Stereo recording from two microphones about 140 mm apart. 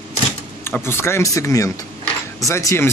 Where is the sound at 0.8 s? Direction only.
15° left (ahead or behind).